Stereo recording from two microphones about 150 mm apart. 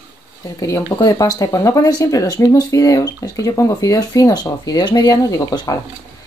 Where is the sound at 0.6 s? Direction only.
20° left (ahead or behind).